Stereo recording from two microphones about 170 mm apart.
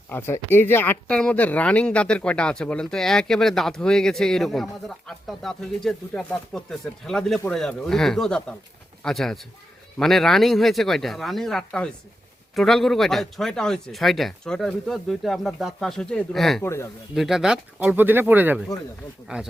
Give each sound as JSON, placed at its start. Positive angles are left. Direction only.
{"t": 0.1, "sound": "speech", "side_deg": 10}
{"t": 16.6, "sound": "speech", "side_deg": 15}
{"t": 17.2, "sound": "speech", "side_deg": 0}